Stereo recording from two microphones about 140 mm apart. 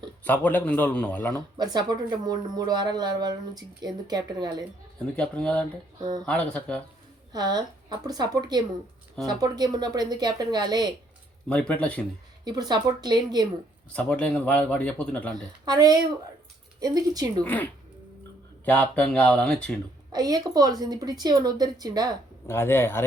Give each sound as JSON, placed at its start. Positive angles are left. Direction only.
{"t": 0.3, "sound": "speech", "side_deg": 10}
{"t": 1.5, "sound": "speech", "side_deg": -30}
{"t": 5.1, "sound": "speech", "side_deg": 10}
{"t": 6.0, "sound": "speech", "side_deg": -30}
{"t": 6.2, "sound": "speech", "side_deg": 10}
{"t": 7.3, "sound": "speech", "side_deg": -30}
{"t": 11.4, "sound": "speech", "side_deg": 10}
{"t": 12.5, "sound": "speech", "side_deg": -30}
{"t": 13.9, "sound": "speech", "side_deg": 10}
{"t": 15.6, "sound": "speech", "side_deg": -30}
{"t": 17.4, "sound": "speech", "side_deg": 10}
{"t": 20.1, "sound": "speech", "side_deg": -25}
{"t": 22.4, "sound": "speech", "side_deg": 15}